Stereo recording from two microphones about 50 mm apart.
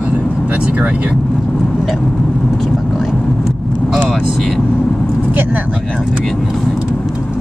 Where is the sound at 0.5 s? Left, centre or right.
Right.